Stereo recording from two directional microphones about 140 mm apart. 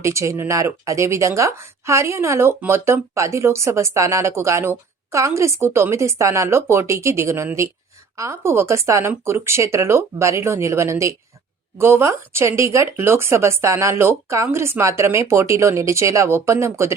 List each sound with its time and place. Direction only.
0.0 s speech: 20° right (ahead or behind)